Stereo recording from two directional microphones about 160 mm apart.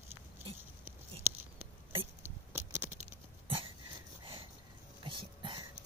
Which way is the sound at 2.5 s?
15° right (ahead or behind).